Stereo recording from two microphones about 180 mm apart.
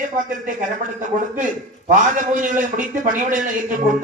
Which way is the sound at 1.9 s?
45° right (ahead or behind).